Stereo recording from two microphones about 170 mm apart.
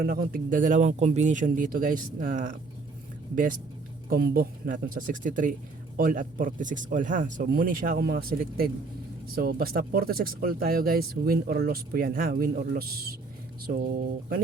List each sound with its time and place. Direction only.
0.0 s speech: 60° right (ahead or behind)
4.1 s speech: 60° right (ahead or behind)